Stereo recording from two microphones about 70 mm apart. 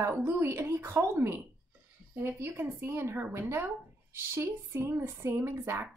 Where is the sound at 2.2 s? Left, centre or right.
Right.